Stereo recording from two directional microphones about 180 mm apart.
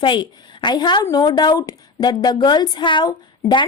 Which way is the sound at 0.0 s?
25° left (ahead or behind).